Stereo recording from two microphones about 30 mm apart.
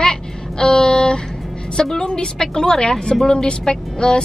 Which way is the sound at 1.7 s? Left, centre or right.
Left.